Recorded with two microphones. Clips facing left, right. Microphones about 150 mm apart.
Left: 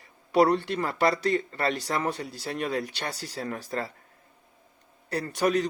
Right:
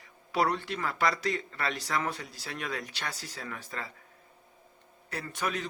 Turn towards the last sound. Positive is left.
turn(degrees=35)  # may be behind; listen again after turning